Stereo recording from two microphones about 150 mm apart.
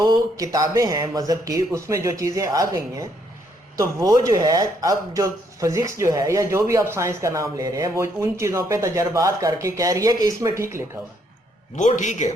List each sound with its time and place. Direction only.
0.0 s speech: 25° right (ahead or behind)
11.9 s a man's voice: 55° left (ahead or behind)